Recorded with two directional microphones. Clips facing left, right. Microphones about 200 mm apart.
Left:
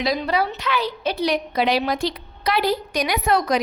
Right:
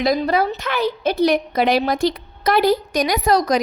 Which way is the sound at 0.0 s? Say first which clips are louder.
Right 4 dB; 45° right (ahead or behind).